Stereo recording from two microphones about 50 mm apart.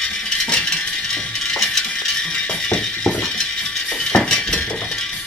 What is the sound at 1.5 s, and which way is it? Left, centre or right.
Music, centre.